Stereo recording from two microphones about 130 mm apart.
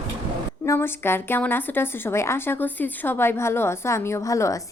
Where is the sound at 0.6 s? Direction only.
15° left (ahead or behind).